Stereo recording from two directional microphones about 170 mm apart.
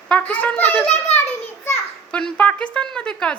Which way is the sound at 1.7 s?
5° left (ahead or behind).